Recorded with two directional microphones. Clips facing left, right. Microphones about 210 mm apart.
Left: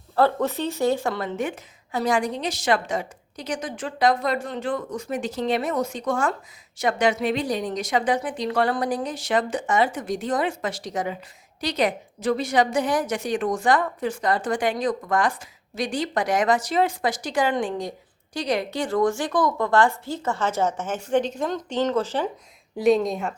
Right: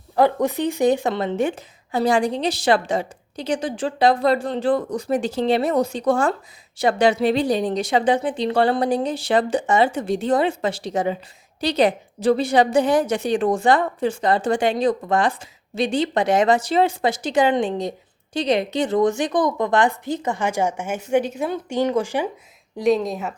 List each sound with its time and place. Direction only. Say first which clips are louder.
0.2 s a woman's voice: right 3 dB; 15° right (ahead or behind)
22.8 s speech: even; centre (ahead or behind)